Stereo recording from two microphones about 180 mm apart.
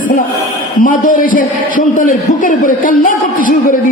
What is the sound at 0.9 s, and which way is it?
A man's voice, 50° left (ahead or behind).